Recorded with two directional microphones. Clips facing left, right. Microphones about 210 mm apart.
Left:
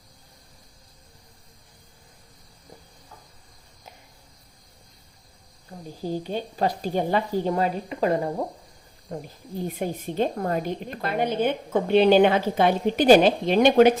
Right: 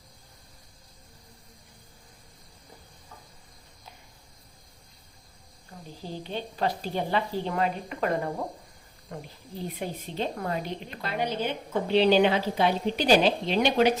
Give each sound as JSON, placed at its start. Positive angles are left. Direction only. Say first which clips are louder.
{"t": 6.0, "sound": "a woman's voice", "louder": "left 6 dB", "side_deg": 45}
{"t": 7.5, "sound": "speech", "louder": "left 3 dB", "side_deg": 30}
{"t": 9.6, "sound": "a woman's voice", "louder": "left 5 dB", "side_deg": 50}